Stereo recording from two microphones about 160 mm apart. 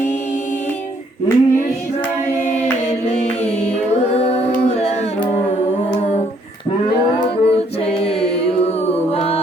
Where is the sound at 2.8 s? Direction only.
45° left (ahead or behind).